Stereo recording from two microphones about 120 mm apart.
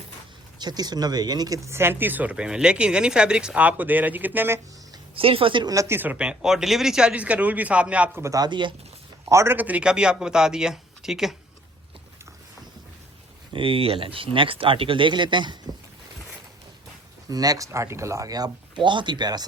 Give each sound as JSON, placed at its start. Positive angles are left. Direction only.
{"t": 0.6, "sound": "speech", "side_deg": -35}
{"t": 5.1, "sound": "speech", "side_deg": -50}
{"t": 5.6, "sound": "speech", "side_deg": -25}
{"t": 6.0, "sound": "speech", "side_deg": -10}
{"t": 8.2, "sound": "speech", "side_deg": -30}
{"t": 9.3, "sound": "speech", "side_deg": -20}
{"t": 13.5, "sound": "speech", "side_deg": -50}
{"t": 17.2, "sound": "speech", "side_deg": -30}